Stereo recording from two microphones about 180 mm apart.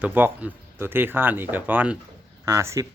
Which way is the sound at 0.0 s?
10° right (ahead or behind).